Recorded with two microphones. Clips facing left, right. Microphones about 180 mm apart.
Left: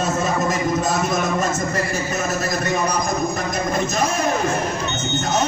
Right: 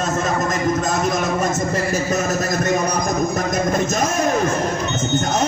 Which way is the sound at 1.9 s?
40° right (ahead or behind).